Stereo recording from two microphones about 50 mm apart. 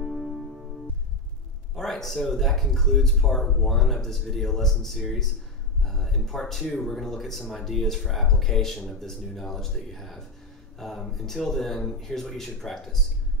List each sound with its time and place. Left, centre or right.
0.0 s music: centre
1.8 s speech: centre